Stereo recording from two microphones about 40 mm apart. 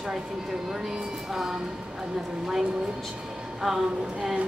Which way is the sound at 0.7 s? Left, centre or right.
Centre.